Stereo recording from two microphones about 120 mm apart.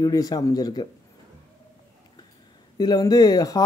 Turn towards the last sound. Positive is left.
turn(degrees=30)  # may be behind; listen again after turning